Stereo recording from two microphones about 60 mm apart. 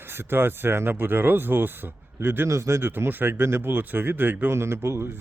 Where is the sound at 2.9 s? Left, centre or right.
Right.